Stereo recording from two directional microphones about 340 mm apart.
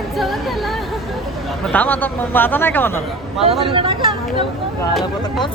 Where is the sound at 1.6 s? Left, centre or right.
Centre.